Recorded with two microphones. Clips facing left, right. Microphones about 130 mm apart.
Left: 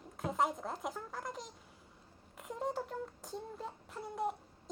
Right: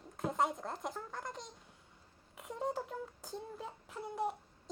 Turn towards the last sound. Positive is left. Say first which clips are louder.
# even
turn(degrees=0)  # may be behind; listen again after turning